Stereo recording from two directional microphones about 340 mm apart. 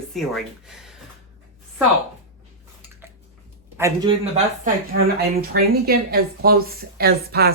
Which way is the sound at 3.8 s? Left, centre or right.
Centre.